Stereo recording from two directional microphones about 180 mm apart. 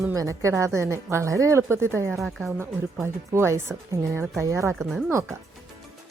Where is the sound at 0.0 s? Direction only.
15° right (ahead or behind).